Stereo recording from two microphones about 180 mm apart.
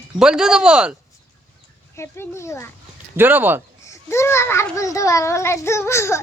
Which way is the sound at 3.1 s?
10° right (ahead or behind).